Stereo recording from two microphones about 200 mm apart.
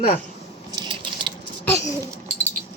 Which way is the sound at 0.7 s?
20° right (ahead or behind).